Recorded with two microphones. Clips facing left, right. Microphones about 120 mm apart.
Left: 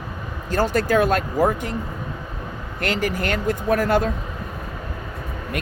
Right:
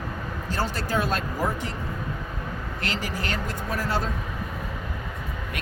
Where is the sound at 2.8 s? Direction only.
50° left (ahead or behind).